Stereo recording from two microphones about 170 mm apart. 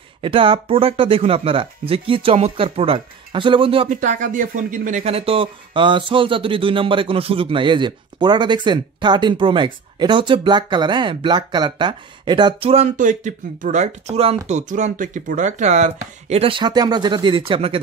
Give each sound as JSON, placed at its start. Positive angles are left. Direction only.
{"t": 0.2, "sound": "speech", "side_deg": -30}
{"t": 3.9, "sound": "speech", "side_deg": -45}
{"t": 5.0, "sound": "speech", "side_deg": -35}
{"t": 12.9, "sound": "speech", "side_deg": -50}